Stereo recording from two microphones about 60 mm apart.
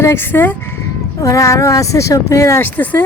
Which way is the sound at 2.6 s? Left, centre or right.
Left.